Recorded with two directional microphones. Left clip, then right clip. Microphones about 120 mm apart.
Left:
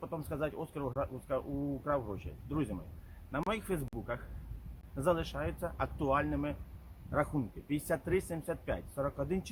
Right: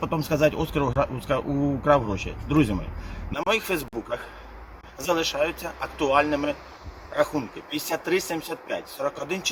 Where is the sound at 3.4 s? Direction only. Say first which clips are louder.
Right 13 dB; 35° left (ahead or behind).